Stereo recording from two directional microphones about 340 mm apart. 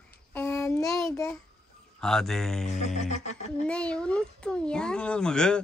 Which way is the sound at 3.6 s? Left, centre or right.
Centre.